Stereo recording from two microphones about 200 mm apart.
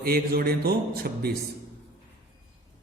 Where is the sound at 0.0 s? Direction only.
50° right (ahead or behind).